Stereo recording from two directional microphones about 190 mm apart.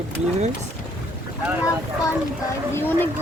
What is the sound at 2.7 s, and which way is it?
Speech, 10° left (ahead or behind).